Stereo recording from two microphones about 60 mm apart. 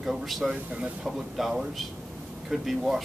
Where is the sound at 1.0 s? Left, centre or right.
Centre.